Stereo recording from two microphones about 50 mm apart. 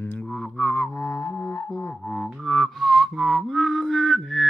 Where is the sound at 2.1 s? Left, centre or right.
Centre.